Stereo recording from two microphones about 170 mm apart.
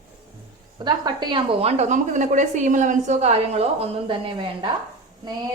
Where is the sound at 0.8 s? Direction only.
25° right (ahead or behind).